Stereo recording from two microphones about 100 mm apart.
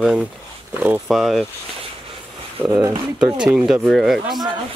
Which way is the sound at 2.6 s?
20° right (ahead or behind).